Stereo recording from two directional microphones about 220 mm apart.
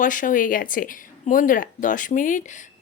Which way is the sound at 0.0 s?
35° left (ahead or behind).